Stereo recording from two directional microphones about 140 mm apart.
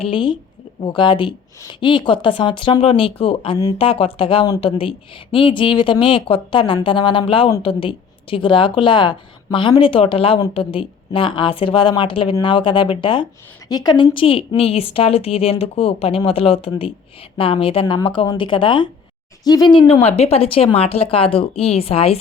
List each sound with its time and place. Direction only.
0.0 s a woman's voice: 35° left (ahead or behind)
19.9 s speech: 40° left (ahead or behind)